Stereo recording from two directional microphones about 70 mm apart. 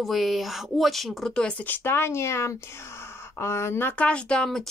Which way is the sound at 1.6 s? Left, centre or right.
Left.